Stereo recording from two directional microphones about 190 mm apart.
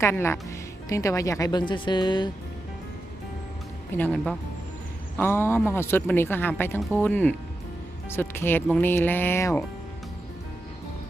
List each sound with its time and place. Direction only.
0.0 s speech: 15° left (ahead or behind)
3.9 s speech: 5° left (ahead or behind)